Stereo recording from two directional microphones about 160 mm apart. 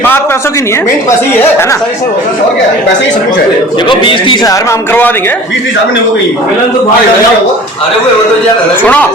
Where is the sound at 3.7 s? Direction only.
30° left (ahead or behind); by 5.3 s 10° left (ahead or behind).